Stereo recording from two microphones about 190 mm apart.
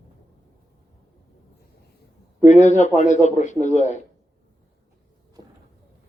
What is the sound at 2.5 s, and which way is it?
A man's voice, 40° left (ahead or behind).